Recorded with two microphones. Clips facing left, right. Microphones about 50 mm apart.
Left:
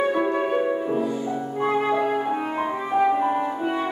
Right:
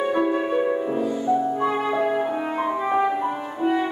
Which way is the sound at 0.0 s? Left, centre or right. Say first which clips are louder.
Even; centre.